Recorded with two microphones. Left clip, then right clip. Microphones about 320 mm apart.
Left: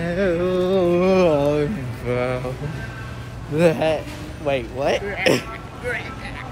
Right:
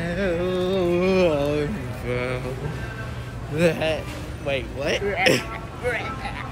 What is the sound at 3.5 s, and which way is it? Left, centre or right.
Speech, centre.